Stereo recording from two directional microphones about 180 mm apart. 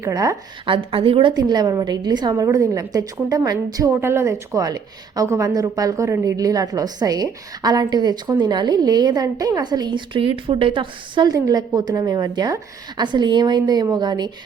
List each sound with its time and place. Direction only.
0.0 s a woman's voice: 20° right (ahead or behind)
0.7 s a woman's voice: 30° right (ahead or behind)